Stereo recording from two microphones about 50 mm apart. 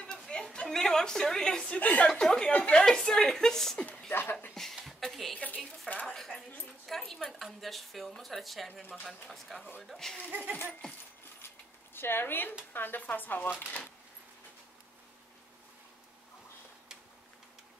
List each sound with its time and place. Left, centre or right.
0.3 s a woman's voice: centre
1.8 s speech: left
2.0 s a woman's voice: centre
2.5 s a woman's voice: left
2.8 s a woman's voice: centre
4.1 s speech: left
4.8 s a sound: centre
5.3 s a woman's voice: left
6.9 s speech: centre
9.9 s a woman's voice: centre
11.9 s speech: left